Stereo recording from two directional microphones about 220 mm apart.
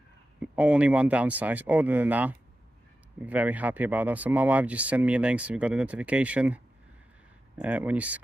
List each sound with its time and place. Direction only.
0.4 s speech: 5° right (ahead or behind)